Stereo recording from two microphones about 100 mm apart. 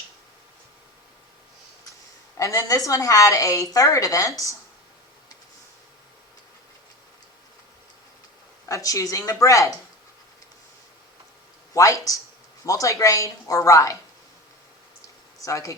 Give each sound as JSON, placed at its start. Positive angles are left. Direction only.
{"t": 2.4, "sound": "a woman's voice", "side_deg": 35}
{"t": 8.6, "sound": "a woman's voice", "side_deg": 35}
{"t": 11.7, "sound": "a woman's voice", "side_deg": 35}
{"t": 15.4, "sound": "speech", "side_deg": 30}